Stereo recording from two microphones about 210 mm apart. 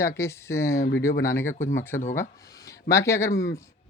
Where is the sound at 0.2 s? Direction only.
15° left (ahead or behind).